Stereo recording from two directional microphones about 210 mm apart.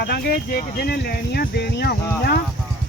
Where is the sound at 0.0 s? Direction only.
50° left (ahead or behind).